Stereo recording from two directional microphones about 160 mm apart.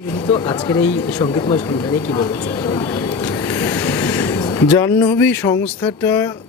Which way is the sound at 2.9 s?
15° left (ahead or behind).